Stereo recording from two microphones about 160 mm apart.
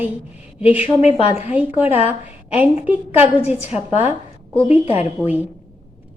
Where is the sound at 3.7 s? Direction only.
40° left (ahead or behind).